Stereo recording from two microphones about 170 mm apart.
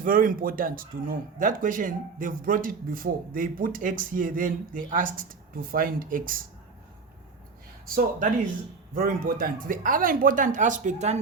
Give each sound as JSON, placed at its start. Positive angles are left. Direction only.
{"t": 0.0, "sound": "speech", "side_deg": -55}
{"t": 7.9, "sound": "speech", "side_deg": -55}